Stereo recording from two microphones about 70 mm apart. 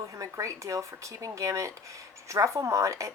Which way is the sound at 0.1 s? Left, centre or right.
Right.